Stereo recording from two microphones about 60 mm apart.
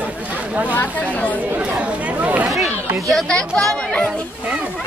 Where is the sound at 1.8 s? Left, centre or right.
Right.